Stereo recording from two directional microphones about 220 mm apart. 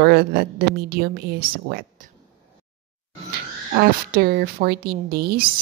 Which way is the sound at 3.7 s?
45° right (ahead or behind).